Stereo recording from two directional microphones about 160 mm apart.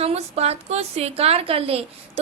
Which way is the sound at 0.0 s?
40° right (ahead or behind).